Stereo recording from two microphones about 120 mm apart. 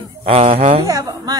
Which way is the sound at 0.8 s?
30° right (ahead or behind).